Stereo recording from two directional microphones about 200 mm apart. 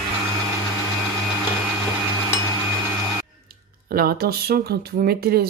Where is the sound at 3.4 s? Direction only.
50° right (ahead or behind).